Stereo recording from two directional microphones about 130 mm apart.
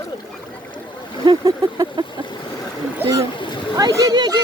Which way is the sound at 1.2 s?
30° right (ahead or behind).